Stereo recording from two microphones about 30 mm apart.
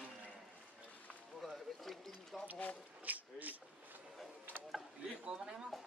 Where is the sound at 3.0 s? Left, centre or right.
Right.